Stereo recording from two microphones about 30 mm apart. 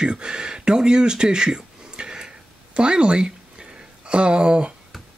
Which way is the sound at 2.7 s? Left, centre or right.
Right.